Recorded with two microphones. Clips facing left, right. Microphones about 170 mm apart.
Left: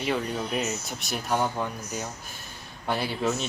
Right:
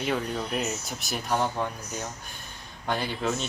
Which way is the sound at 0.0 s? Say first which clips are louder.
Left 1 dB; centre (ahead or behind).